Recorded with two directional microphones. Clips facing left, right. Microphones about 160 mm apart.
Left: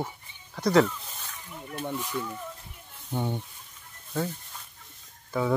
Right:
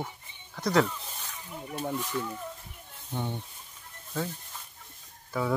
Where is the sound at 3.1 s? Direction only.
15° left (ahead or behind).